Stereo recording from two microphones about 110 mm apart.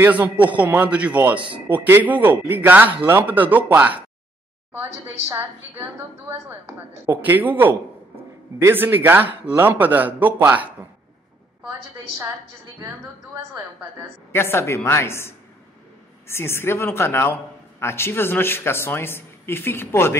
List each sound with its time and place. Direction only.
0.0 s a man's voice: 15° right (ahead or behind)
5.0 s a woman's voice: 20° right (ahead or behind)
14.3 s a man's voice: 25° left (ahead or behind)